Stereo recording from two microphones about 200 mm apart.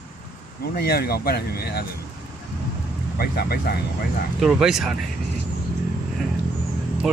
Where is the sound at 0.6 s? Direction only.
50° left (ahead or behind).